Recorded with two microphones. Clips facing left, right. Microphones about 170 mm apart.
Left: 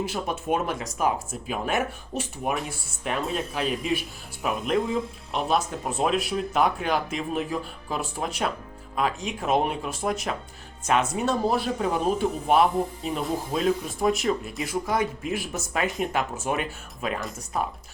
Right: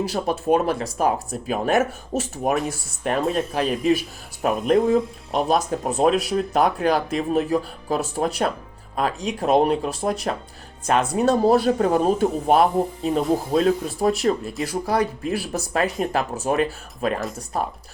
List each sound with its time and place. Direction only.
0.0 s speech: 35° right (ahead or behind)